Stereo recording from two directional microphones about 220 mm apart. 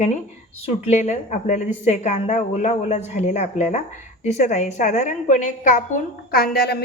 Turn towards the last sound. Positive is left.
turn(degrees=45)  # may be behind; listen again after turning